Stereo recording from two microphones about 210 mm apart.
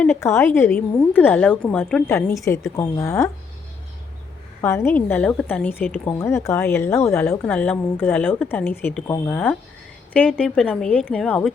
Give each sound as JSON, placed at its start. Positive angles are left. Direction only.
{"t": 0.0, "sound": "a woman's voice", "side_deg": 10}
{"t": 4.6, "sound": "a woman's voice", "side_deg": 10}